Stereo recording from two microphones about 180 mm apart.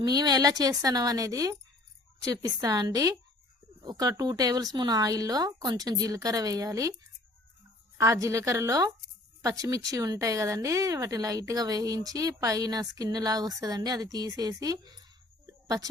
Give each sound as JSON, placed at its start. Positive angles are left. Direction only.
{"t": 0.0, "sound": "speech", "side_deg": -20}
{"t": 7.9, "sound": "a woman's voice", "side_deg": -15}